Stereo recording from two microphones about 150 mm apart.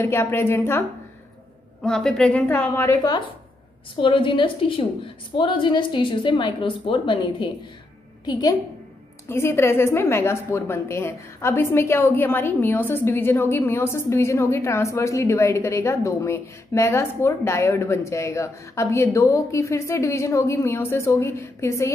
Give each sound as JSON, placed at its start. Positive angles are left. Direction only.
{"t": 0.0, "sound": "a woman's voice", "side_deg": 15}
{"t": 1.8, "sound": "a woman's voice", "side_deg": 5}